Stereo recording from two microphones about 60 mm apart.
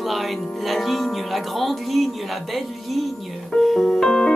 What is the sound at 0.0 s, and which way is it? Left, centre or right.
Music, centre.